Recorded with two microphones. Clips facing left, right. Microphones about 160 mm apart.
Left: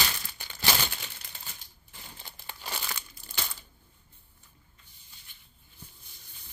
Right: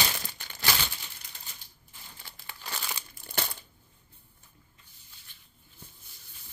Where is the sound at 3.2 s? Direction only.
60° right (ahead or behind).